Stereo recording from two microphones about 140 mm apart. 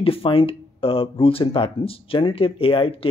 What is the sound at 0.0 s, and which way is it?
Speech, 40° left (ahead or behind).